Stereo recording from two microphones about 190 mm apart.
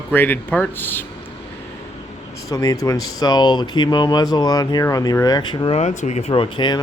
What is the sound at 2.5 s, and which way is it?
Speech, 15° left (ahead or behind).